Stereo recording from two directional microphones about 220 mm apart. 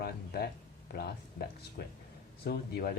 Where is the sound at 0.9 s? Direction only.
45° left (ahead or behind).